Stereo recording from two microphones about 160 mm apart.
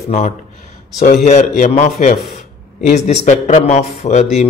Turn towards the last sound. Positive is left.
turn(degrees=45)  # may be behind; listen again after turning